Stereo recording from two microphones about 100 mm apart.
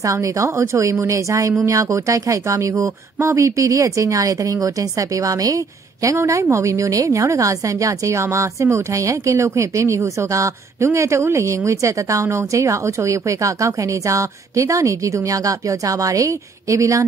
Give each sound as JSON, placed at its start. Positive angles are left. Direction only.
{"t": 0.0, "sound": "a woman's voice", "side_deg": -35}